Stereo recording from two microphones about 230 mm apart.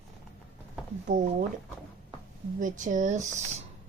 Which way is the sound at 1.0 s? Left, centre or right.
Right.